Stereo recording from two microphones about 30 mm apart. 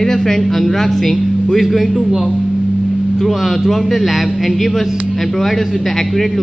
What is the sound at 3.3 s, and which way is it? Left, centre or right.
A man's voice, centre.